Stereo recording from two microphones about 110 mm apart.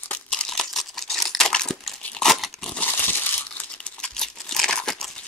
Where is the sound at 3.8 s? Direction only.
5° left (ahead or behind).